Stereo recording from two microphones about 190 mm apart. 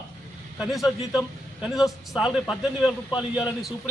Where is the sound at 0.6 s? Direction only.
Centre (ahead or behind).